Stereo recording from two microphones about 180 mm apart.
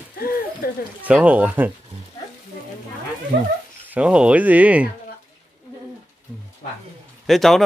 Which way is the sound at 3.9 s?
5° right (ahead or behind).